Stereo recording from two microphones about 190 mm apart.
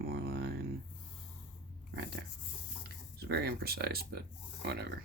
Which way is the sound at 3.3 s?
55° right (ahead or behind).